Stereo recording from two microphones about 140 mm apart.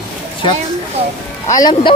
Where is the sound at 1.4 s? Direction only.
25° left (ahead or behind).